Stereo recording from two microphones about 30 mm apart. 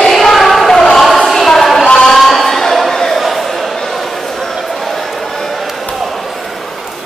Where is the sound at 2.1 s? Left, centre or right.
Centre.